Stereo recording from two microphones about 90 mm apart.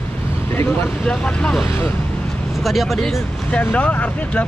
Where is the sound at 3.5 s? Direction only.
15° left (ahead or behind).